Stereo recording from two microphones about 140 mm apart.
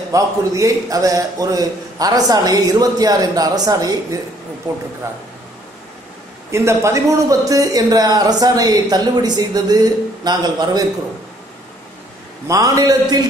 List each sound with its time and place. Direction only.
0.1 s a man's voice: 25° right (ahead or behind)
6.5 s a man's voice: 20° right (ahead or behind)
12.4 s a man's voice: 25° right (ahead or behind)